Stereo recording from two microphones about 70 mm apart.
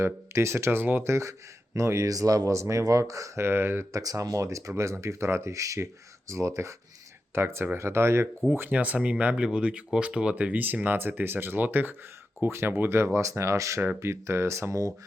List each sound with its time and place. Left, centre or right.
0.0 s speech: right
1.0 s speech: right
3.4 s speech: right
3.9 s speech: right
8.5 s speech: right
13.1 s speech: right